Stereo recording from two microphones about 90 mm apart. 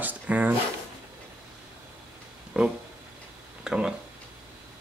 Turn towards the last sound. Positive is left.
turn(degrees=-10)  # may be behind; listen again after turning